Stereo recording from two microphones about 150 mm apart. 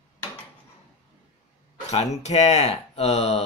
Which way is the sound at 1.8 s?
50° left (ahead or behind).